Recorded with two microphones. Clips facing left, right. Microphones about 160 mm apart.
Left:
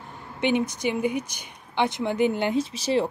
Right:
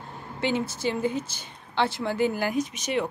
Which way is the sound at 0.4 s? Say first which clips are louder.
Left 3 dB; 20° left (ahead or behind).